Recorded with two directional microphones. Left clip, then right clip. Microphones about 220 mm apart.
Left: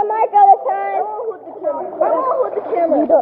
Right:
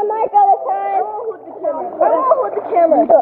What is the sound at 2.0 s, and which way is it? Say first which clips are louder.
Speech: right 3 dB; 45° right (ahead or behind).